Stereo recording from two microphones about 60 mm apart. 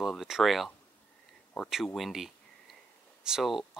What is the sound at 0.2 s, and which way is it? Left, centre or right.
Speech, centre.